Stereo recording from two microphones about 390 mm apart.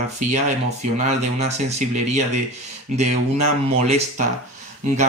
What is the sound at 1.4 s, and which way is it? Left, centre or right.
Speech, centre.